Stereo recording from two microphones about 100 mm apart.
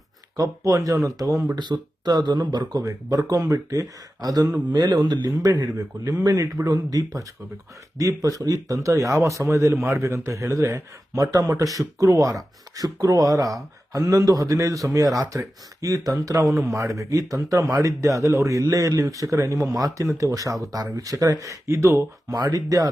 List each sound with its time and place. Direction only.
0.3 s speech: 35° right (ahead or behind)
1.7 s speech: 45° right (ahead or behind)
16.5 s speech: centre (ahead or behind)
16.7 s speech: 30° right (ahead or behind)